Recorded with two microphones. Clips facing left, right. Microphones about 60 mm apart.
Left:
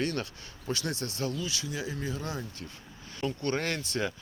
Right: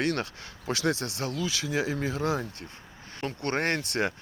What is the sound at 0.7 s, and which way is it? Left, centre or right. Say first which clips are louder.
Speech: right 5 dB; right.